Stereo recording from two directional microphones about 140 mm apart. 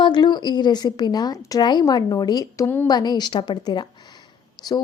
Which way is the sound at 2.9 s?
30° left (ahead or behind).